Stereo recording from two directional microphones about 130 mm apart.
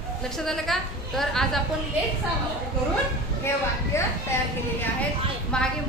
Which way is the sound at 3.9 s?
20° left (ahead or behind).